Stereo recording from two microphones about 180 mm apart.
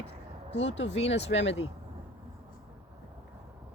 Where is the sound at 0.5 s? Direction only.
85° left.